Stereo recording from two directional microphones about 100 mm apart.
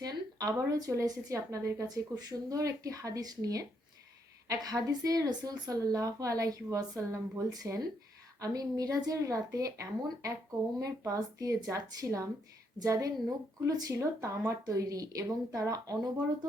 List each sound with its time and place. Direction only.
0.0 s a woman's voice: 35° right (ahead or behind)
10.8 s a woman's voice: 35° right (ahead or behind)